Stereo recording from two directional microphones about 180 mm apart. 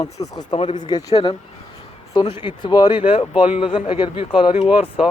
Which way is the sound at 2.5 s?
25° left (ahead or behind).